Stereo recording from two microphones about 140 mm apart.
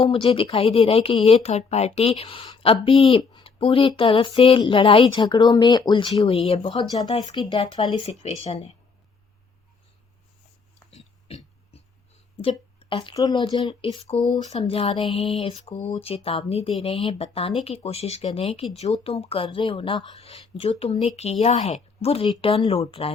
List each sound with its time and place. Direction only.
0.0 s speech: 40° left (ahead or behind)
8.2 s speech: 50° left (ahead or behind)
10.9 s a sound: 45° left (ahead or behind)
13.1 s speech: 30° left (ahead or behind)